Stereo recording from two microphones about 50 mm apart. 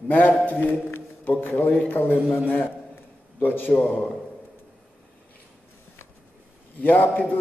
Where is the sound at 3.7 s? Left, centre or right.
Left.